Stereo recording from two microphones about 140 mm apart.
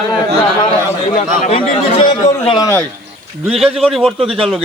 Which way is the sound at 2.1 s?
30° left (ahead or behind).